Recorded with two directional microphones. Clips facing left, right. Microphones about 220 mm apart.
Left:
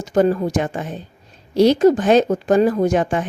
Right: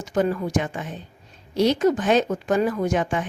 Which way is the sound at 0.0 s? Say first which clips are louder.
Left 6 dB; 35° left (ahead or behind).